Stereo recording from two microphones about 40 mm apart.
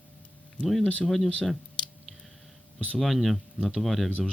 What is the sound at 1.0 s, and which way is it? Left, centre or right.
Speech, centre.